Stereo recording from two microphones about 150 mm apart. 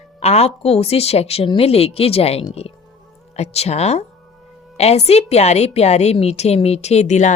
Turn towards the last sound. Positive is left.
turn(degrees=50)  # may be behind; listen again after turning